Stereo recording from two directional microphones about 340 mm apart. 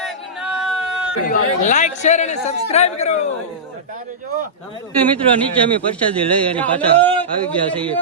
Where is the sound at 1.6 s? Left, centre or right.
Left.